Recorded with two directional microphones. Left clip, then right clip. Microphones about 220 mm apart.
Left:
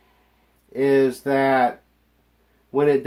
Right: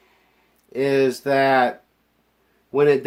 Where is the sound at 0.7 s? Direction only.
45° right (ahead or behind).